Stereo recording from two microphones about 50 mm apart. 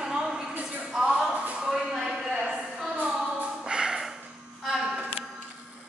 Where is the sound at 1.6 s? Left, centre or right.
Centre.